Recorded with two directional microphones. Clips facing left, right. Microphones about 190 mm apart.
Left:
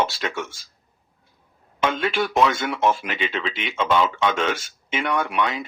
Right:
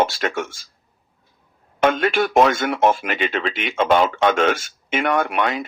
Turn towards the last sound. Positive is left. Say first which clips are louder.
# right 3 dB
turn(degrees=-55)  # may be behind; listen again after turning